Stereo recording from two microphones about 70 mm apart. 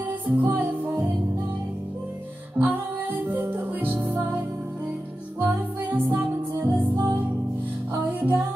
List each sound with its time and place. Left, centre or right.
0.4 s music: right
2.6 s music: right
5.4 s music: right
6.6 s music: right
8.0 s music: right